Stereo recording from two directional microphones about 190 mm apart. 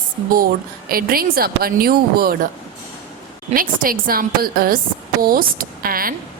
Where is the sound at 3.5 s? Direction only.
50° right (ahead or behind).